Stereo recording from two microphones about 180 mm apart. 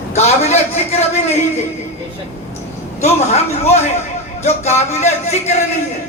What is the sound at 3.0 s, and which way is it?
Speech, 35° left (ahead or behind).